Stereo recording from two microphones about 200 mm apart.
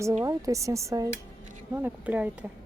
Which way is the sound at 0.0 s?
15° right (ahead or behind).